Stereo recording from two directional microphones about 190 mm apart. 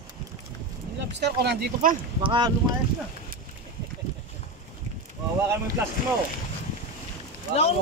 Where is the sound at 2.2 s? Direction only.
25° right (ahead or behind).